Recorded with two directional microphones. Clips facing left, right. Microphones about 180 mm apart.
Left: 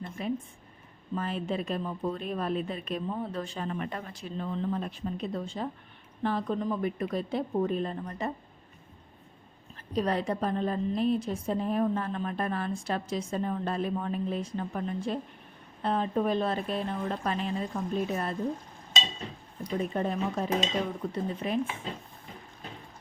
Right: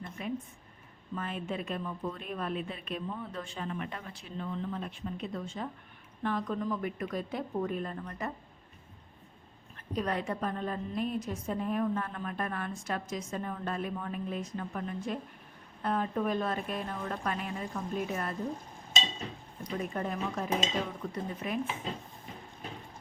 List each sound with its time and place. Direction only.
0.2 s a woman's voice: 35° left (ahead or behind)
9.9 s a woman's voice: 30° left (ahead or behind)
19.8 s a woman's voice: 25° left (ahead or behind)